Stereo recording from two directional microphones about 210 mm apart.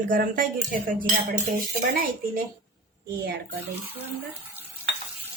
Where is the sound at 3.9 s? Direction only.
10° right (ahead or behind).